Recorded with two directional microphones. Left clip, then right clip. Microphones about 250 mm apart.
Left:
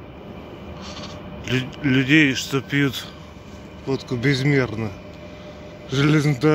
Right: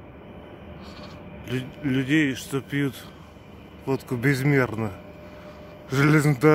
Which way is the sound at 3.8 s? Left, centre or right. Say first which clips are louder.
Left 2 dB; right.